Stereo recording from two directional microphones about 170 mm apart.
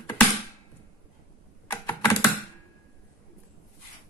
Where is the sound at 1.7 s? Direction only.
15° left (ahead or behind).